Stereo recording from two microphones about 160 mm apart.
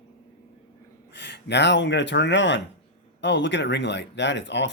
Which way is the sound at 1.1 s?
90° left.